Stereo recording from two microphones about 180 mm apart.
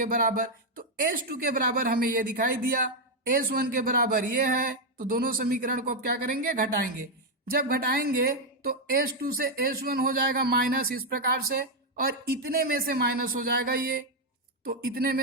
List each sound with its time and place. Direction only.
0.0 s a woman's voice: 50° right (ahead or behind)